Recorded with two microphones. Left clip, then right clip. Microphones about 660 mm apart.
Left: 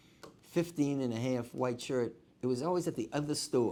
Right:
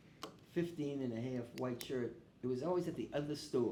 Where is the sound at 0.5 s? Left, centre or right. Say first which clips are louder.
Left 8 dB; left.